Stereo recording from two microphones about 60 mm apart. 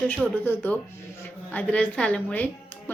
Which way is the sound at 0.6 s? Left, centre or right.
Left.